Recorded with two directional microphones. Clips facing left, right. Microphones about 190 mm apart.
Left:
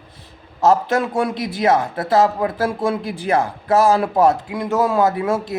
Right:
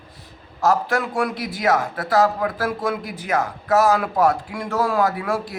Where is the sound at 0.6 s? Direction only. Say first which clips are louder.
Left 4 dB; 25° left (ahead or behind).